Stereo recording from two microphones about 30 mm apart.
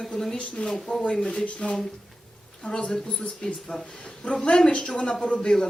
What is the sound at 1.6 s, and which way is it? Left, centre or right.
A woman's voice, left.